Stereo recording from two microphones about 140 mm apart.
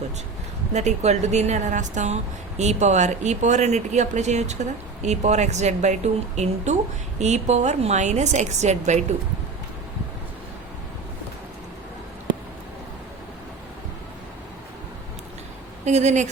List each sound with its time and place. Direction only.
0.7 s speech: 55° right (ahead or behind)
15.8 s speech: 55° right (ahead or behind)